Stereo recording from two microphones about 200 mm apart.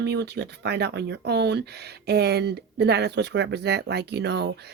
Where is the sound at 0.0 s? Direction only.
55° right (ahead or behind).